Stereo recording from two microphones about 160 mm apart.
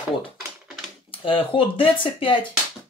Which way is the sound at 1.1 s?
35° left (ahead or behind).